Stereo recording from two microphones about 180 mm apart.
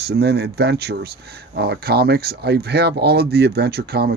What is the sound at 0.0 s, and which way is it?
Speech, 65° right (ahead or behind).